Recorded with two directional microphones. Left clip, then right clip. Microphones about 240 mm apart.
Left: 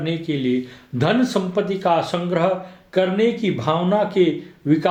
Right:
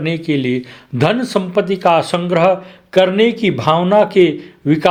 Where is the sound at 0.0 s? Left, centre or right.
Right.